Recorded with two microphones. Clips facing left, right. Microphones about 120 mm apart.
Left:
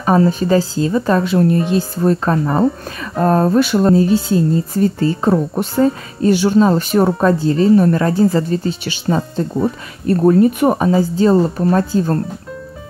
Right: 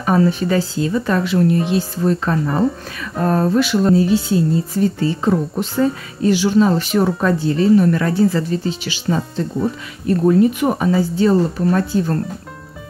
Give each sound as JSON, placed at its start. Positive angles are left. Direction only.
{"t": 0.0, "sound": "speech", "side_deg": 35}